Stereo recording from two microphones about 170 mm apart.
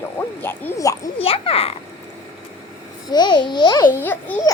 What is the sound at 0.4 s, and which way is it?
Speech, 15° left (ahead or behind).